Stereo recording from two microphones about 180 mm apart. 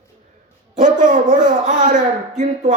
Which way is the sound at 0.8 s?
45° right (ahead or behind).